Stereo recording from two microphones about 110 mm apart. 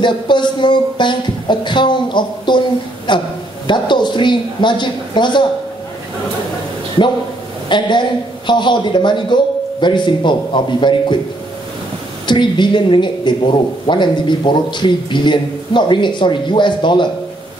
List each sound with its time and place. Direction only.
0.0 s a woman's voice: 45° left (ahead or behind)
7.6 s a woman's voice: 45° left (ahead or behind)
12.3 s a woman's voice: 45° left (ahead or behind)